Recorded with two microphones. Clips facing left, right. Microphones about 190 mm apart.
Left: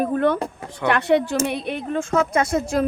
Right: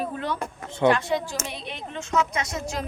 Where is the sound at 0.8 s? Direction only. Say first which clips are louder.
Left 3 dB; 65° left (ahead or behind).